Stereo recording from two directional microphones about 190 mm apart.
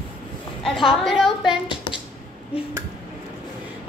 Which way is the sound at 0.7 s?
Centre (ahead or behind).